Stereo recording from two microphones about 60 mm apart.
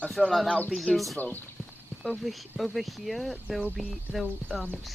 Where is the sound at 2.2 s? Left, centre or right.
Centre.